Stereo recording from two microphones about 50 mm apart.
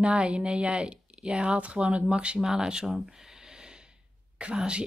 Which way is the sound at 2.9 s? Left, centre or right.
Centre.